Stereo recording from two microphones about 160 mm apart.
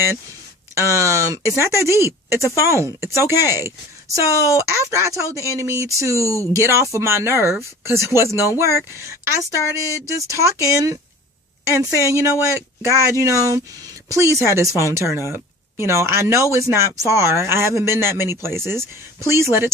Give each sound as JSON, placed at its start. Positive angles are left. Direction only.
{"t": 0.8, "sound": "speech", "side_deg": -20}